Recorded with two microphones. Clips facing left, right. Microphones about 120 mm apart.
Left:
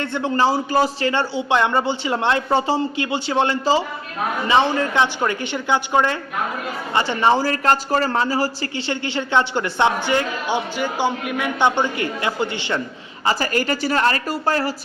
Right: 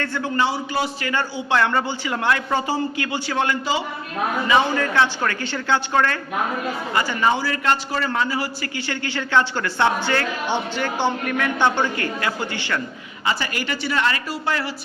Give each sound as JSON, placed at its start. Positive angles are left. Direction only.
{"t": 0.0, "sound": "speech", "side_deg": 25}
{"t": 0.4, "sound": "a man's voice", "side_deg": 40}
{"t": 1.0, "sound": "speech", "side_deg": 25}
{"t": 6.9, "sound": "a man's voice", "side_deg": 30}
{"t": 8.9, "sound": "speech", "side_deg": 20}
{"t": 13.2, "sound": "a man's voice", "side_deg": 40}